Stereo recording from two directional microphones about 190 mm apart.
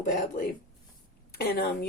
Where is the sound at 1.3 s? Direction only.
55° left (ahead or behind).